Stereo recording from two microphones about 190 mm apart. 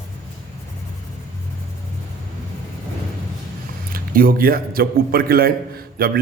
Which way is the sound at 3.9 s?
50° right (ahead or behind).